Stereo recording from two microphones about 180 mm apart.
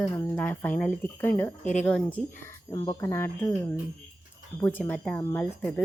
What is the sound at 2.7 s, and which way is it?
A woman's voice, 20° left (ahead or behind).